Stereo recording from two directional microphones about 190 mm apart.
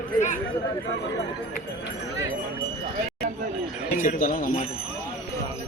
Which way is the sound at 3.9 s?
45° left (ahead or behind).